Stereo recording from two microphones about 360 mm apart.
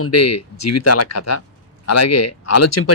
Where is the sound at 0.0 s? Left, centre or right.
Left.